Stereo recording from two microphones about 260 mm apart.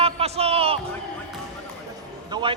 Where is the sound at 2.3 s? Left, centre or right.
Centre.